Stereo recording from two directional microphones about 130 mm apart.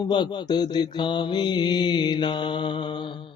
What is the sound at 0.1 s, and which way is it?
Mantra, 35° left (ahead or behind).